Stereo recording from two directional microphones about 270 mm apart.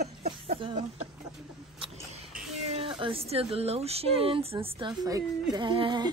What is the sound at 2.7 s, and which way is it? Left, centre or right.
Speech, right.